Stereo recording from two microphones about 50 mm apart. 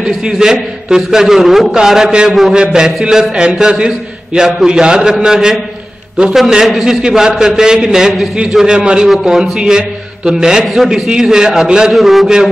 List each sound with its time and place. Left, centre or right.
0.4 s a man's voice: centre
2.5 s a man's voice: centre
10.7 s speech: centre
11.2 s a man's voice: centre
11.9 s speech: centre